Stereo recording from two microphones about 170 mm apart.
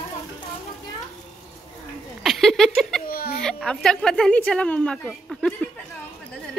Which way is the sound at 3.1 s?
60° left (ahead or behind).